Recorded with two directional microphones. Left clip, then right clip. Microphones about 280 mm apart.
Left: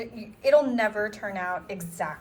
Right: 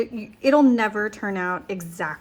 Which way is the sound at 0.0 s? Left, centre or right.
Right.